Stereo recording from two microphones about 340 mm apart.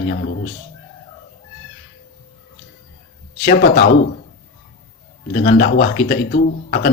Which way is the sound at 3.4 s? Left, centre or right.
Left.